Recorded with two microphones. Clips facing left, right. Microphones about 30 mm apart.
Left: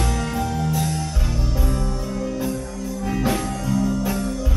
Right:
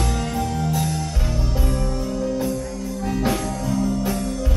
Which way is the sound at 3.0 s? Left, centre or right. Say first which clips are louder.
Even; centre.